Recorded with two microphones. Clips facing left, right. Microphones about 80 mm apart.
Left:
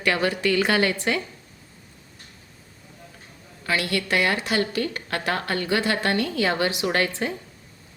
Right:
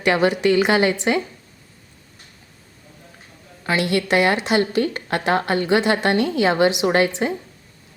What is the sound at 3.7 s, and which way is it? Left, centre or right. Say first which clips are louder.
A woman's voice: right 5 dB; right.